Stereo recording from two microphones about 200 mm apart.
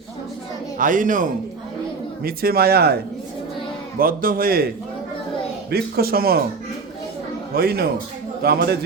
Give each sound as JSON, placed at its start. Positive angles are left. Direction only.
{"t": 0.8, "sound": "a man's voice", "side_deg": -40}
{"t": 5.7, "sound": "a man's voice", "side_deg": -50}
{"t": 7.5, "sound": "a man's voice", "side_deg": -50}